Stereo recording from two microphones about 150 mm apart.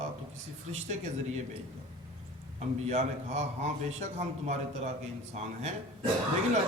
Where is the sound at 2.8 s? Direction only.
45° right (ahead or behind).